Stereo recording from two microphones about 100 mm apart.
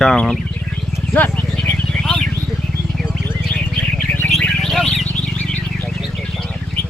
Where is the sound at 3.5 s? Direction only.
10° left (ahead or behind).